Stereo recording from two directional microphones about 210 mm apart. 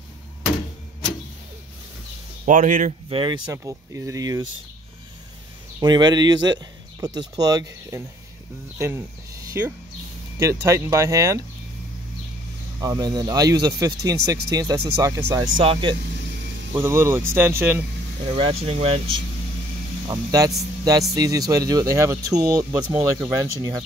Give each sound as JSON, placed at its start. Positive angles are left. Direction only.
{"t": 2.4, "sound": "speech", "side_deg": -40}
{"t": 3.1, "sound": "speech", "side_deg": -25}
{"t": 3.4, "sound": "speech", "side_deg": -15}
{"t": 5.8, "sound": "speech", "side_deg": -20}
{"t": 12.8, "sound": "speech", "side_deg": -20}
{"t": 16.7, "sound": "speech", "side_deg": -10}
{"t": 18.2, "sound": "speech", "side_deg": -30}
{"t": 20.1, "sound": "speech", "side_deg": -15}